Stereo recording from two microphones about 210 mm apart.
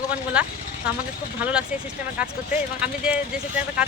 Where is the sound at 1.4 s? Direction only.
5° right (ahead or behind).